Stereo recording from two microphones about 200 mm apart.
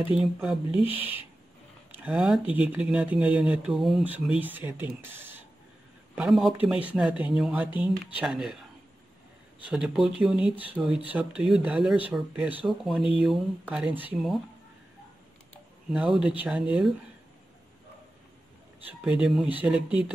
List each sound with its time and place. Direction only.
0.1 s speech: centre (ahead or behind)
0.8 s speech: 25° left (ahead or behind)
1.9 s speech: 5° right (ahead or behind)
9.7 s speech: 5° right (ahead or behind)
15.9 s speech: 5° right (ahead or behind)
18.9 s speech: 5° right (ahead or behind)